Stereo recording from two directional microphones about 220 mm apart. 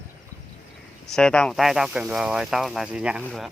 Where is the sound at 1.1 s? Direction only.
5° left (ahead or behind).